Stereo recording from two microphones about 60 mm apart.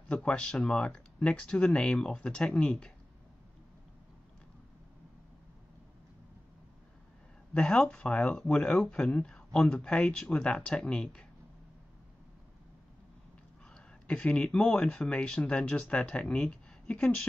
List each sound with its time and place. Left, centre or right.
0.1 s speech: centre
7.5 s speech: centre
13.7 s speech: centre